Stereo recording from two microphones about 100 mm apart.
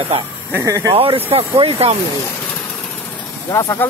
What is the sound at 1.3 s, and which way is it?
Speech, 80° right.